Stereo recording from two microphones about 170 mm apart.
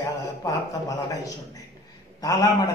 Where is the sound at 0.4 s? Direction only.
20° left (ahead or behind).